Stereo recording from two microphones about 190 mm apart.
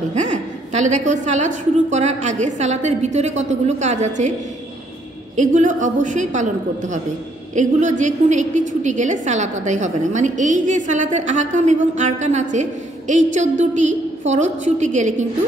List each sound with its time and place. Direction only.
0.1 s a woman's voice: 40° right (ahead or behind)
5.3 s a woman's voice: 40° right (ahead or behind)